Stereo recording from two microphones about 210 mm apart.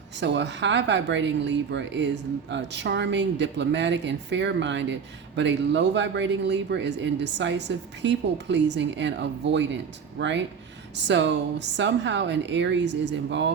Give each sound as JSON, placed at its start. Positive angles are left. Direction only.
{"t": 0.2, "sound": "speech", "side_deg": -55}